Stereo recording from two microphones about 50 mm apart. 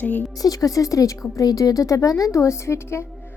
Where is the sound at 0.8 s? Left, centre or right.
Left.